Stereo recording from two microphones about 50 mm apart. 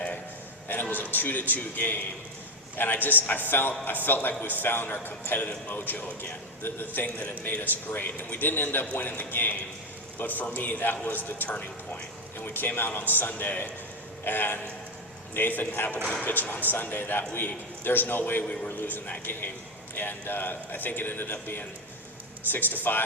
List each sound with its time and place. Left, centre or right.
0.7 s a man's voice: left